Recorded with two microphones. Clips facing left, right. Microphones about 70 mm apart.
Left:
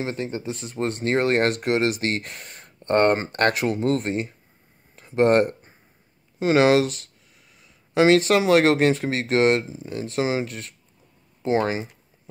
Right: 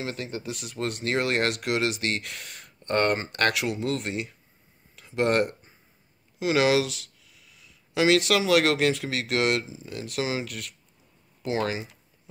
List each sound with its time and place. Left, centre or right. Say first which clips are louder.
0.0 s speech: left 5 dB; left
4.9 s a sound: left 6 dB; left
6.4 s speech: left 5 dB; left